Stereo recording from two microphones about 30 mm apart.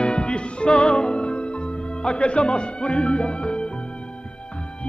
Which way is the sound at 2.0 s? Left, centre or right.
Left.